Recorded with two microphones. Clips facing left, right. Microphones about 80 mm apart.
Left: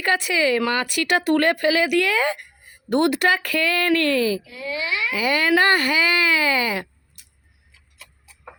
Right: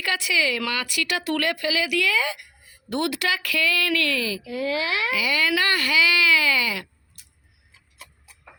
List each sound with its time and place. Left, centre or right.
0.0 s speech: left
4.4 s speech: right
5.1 s speech: left